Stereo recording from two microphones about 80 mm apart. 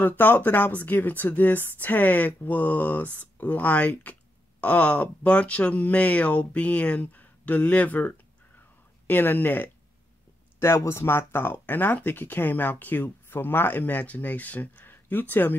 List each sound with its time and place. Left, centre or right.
0.0 s speech: left